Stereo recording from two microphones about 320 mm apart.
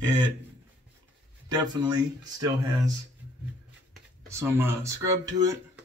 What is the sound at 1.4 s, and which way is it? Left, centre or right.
Speech, centre.